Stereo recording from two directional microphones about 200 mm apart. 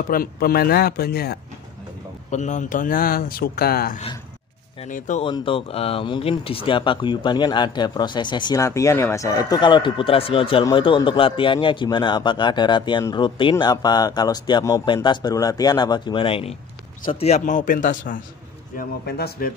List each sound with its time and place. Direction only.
0.1 s speech: 45° left (ahead or behind)
2.3 s a man's voice: 35° left (ahead or behind)
5.2 s a man's voice: 25° left (ahead or behind); by 19.5 s 50° left (ahead or behind)